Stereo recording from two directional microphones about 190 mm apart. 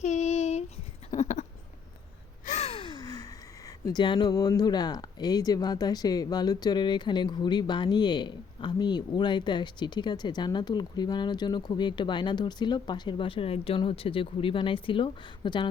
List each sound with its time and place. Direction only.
0.0 s child singing: 35° left (ahead or behind)
1.1 s a sound: 35° left (ahead or behind)
2.5 s gasp: 35° left (ahead or behind); by 3.2 s 20° left (ahead or behind)
3.8 s speech: 25° left (ahead or behind)